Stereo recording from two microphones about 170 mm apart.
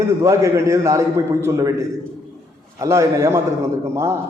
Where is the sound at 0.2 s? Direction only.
15° right (ahead or behind).